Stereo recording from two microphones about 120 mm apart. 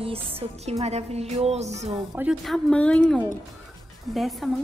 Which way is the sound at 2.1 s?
10° right (ahead or behind).